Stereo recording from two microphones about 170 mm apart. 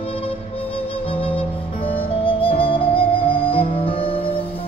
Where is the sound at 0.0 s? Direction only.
35° left (ahead or behind).